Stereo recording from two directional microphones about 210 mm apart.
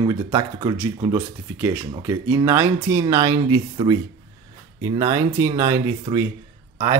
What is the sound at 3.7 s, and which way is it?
Speech, 25° right (ahead or behind).